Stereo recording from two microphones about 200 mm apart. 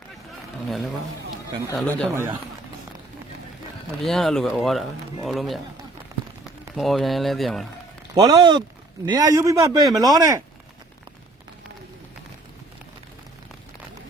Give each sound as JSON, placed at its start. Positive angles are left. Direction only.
{"t": 1.7, "sound": "speech", "side_deg": 5}
{"t": 2.0, "sound": "a man's voice", "side_deg": -10}
{"t": 4.0, "sound": "speech", "side_deg": 0}
{"t": 6.7, "sound": "speech", "side_deg": 0}
{"t": 8.1, "sound": "a man's voice", "side_deg": -20}